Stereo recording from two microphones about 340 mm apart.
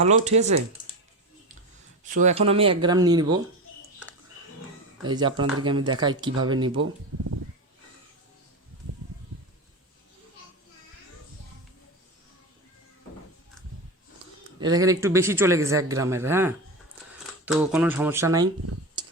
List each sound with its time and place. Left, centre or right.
0.0 s speech: centre
2.1 s a man's voice: centre
5.0 s a man's voice: centre
6.7 s speech: right
14.6 s a man's voice: centre